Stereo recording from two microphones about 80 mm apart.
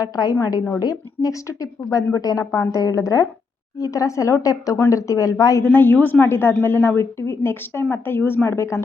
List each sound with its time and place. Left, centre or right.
0.0 s speech: left
1.8 s speech: left
2.1 s speech: left
5.6 s a woman's voice: left